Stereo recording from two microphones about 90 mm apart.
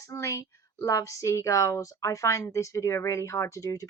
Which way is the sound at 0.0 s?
35° left (ahead or behind).